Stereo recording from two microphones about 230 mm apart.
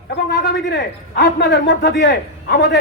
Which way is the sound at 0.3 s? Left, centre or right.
Left.